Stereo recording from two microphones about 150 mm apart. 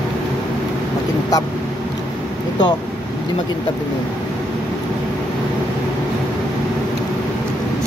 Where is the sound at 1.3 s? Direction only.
25° left (ahead or behind).